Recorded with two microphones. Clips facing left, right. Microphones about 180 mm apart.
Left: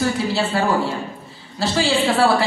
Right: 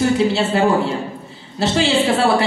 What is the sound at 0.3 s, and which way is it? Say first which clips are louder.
Speech: right 3 dB; 25° right (ahead or behind).